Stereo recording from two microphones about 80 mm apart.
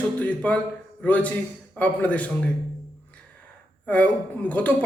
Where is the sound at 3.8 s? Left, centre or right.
Centre.